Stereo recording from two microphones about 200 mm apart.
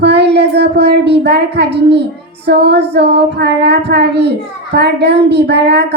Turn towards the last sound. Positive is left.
turn(degrees=-55)  # may be behind; listen again after turning